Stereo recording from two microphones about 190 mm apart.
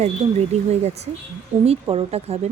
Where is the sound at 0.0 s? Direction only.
35° right (ahead or behind).